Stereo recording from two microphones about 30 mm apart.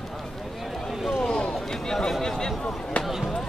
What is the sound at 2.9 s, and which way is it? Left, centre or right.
Basketball bounce, left.